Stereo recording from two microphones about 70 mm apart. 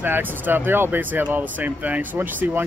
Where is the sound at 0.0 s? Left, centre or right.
Right.